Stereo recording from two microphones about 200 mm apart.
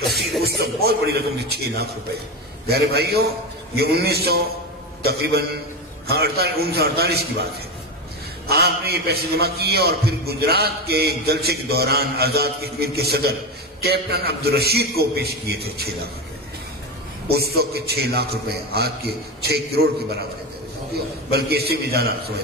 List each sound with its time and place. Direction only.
0.0 s music: centre (ahead or behind)
0.4 s a man's voice: 55° right (ahead or behind)
8.5 s a man's voice: 50° right (ahead or behind)
17.3 s a man's voice: 50° right (ahead or behind)
21.3 s a man's voice: 50° right (ahead or behind)